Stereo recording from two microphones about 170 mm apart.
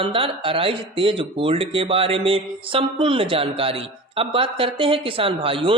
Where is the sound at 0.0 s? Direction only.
30° right (ahead or behind).